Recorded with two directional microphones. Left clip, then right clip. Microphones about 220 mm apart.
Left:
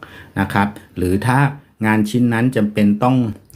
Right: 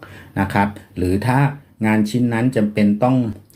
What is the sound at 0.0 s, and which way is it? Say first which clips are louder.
Speech: left 1 dB; 10° left (ahead or behind).